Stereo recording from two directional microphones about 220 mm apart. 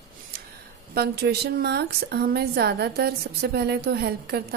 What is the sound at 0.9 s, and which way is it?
A woman's voice, 45° right (ahead or behind).